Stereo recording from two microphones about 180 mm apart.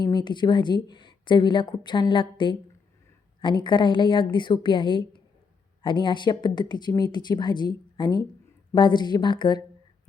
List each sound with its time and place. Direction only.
0.0 s a woman's voice: 25° left (ahead or behind)